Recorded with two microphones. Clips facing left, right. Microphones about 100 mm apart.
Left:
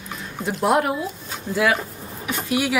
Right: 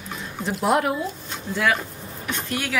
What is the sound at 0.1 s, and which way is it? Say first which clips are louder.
A woman's voice: left 1 dB; centre (ahead or behind).